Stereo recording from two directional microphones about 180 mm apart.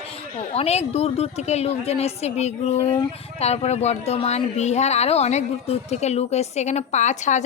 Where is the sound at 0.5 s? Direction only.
35° left (ahead or behind).